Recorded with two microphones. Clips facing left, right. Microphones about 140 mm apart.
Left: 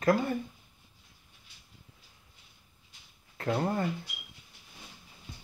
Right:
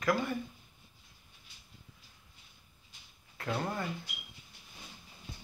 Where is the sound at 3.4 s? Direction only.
30° left (ahead or behind).